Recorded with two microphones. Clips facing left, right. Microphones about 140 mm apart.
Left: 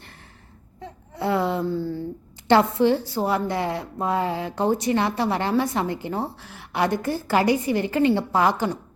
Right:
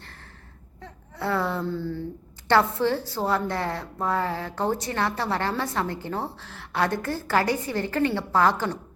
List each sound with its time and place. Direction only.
0.8 s whimper: 15° left (ahead or behind)
2.5 s a woman's voice: 20° left (ahead or behind)